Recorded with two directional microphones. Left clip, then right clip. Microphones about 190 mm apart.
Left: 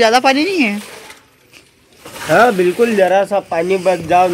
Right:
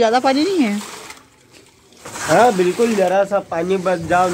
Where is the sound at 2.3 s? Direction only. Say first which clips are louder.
Left 2 dB; 45° left (ahead or behind).